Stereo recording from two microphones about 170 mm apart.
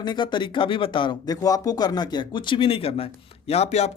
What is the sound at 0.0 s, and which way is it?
Speech, 25° left (ahead or behind).